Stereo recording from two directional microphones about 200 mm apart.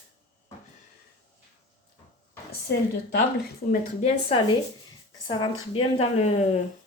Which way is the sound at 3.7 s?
35° left (ahead or behind).